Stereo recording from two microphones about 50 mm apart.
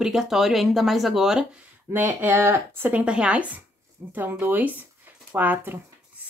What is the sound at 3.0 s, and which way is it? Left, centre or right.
Speech, right.